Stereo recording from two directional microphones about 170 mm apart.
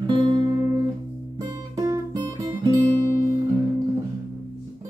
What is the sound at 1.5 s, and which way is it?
Guitar, 20° right (ahead or behind).